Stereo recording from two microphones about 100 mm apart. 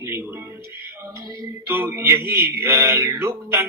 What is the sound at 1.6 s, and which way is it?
Speech, 25° right (ahead or behind).